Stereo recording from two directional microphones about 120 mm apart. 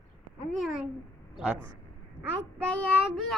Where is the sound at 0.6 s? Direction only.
5° right (ahead or behind).